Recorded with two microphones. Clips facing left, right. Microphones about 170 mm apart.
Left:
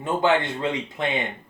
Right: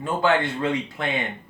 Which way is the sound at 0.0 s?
20° left (ahead or behind).